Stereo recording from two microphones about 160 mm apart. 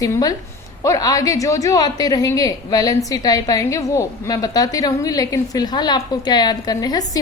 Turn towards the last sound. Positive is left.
turn(degrees=25)  # may be behind; listen again after turning